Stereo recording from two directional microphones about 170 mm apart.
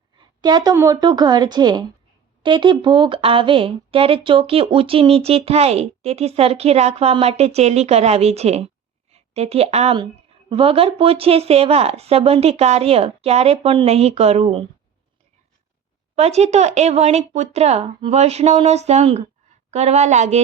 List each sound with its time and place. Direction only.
0.2 s a woman's voice: 25° right (ahead or behind)
16.1 s a woman's voice: 40° right (ahead or behind)